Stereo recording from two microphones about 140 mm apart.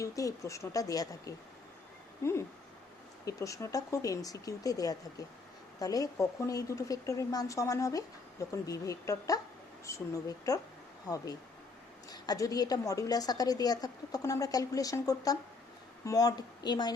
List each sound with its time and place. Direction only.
0.0 s speech: 25° left (ahead or behind)
12.1 s speech: 30° left (ahead or behind)